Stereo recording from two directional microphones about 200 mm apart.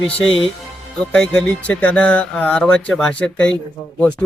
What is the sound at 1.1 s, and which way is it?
Speech, 5° left (ahead or behind).